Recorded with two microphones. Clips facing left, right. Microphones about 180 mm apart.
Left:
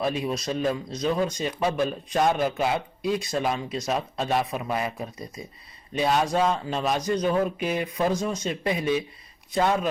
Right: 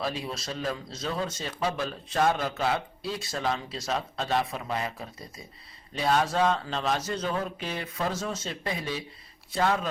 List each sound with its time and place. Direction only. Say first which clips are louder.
0.0 s a man's voice: left 6 dB; 20° left (ahead or behind)